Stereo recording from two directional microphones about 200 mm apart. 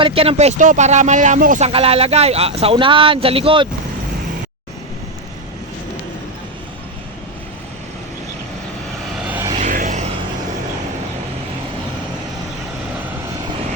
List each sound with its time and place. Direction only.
0.0 s speech: 30° right (ahead or behind)
9.2 s vehicle: 10° right (ahead or behind)
9.6 s vehicle: 40° right (ahead or behind)